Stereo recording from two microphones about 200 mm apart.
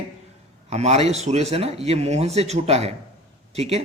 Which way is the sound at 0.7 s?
30° right (ahead or behind).